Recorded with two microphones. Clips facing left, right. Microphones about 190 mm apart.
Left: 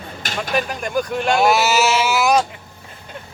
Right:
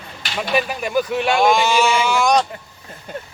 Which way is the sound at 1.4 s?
5° left (ahead or behind).